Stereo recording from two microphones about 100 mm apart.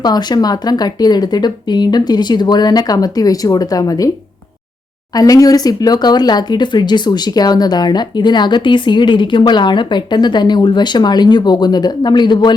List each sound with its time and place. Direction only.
0.0 s speech: 45° left (ahead or behind)
5.1 s speech: 35° left (ahead or behind)